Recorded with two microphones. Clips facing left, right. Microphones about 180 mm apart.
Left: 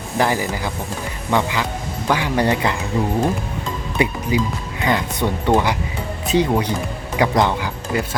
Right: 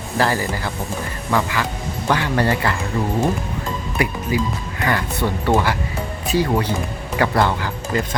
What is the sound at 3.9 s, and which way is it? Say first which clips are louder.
Music: left 2 dB; 20° left (ahead or behind).